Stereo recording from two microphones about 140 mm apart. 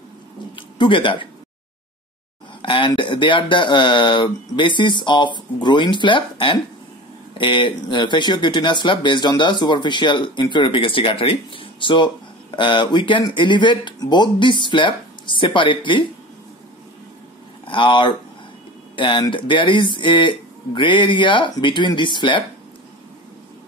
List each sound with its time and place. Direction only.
0.6 s speech: 35° left (ahead or behind)
2.6 s speech: 35° left (ahead or behind)
17.6 s speech: 35° left (ahead or behind)